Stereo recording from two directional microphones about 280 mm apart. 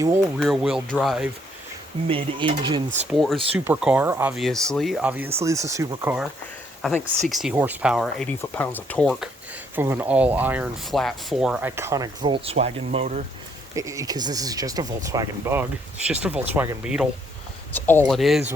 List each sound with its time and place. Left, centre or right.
0.3 s speech: centre
2.0 s speech: centre
3.1 s speech: centre
6.8 s speech: centre; by 13.2 s right
13.7 s speech: centre